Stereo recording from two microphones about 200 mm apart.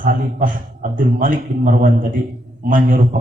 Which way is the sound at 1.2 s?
40° right (ahead or behind).